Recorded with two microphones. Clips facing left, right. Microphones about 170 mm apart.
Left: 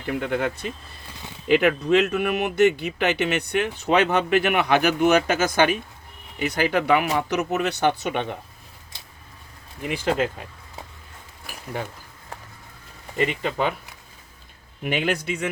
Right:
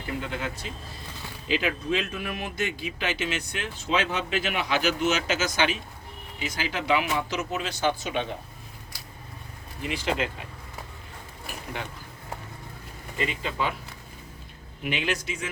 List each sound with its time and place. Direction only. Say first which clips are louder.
0.1 s speech: left 8 dB; 60° left (ahead or behind)
9.8 s speech: left 5 dB; 50° left (ahead or behind)
13.1 s speech: left 6 dB; 55° left (ahead or behind)
14.8 s speech: left 5 dB; 50° left (ahead or behind)